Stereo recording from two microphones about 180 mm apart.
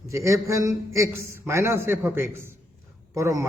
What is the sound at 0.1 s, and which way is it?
A man's voice, 15° right (ahead or behind).